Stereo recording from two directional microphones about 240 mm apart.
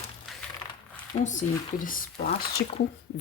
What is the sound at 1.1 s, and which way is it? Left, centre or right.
Speech, left.